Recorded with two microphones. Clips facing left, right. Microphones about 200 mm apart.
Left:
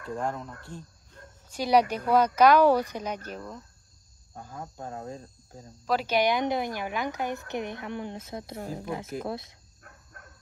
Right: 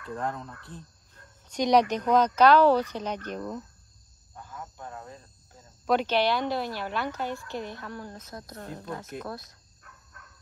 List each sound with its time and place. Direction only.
0.1 s speech: centre (ahead or behind)
4.4 s cricket: 35° left (ahead or behind)
5.9 s speech: 5° left (ahead or behind); by 8.5 s 25° left (ahead or behind)
8.5 s speech: 10° left (ahead or behind)
9.2 s speech: 25° left (ahead or behind)
9.8 s a sound: 50° left (ahead or behind)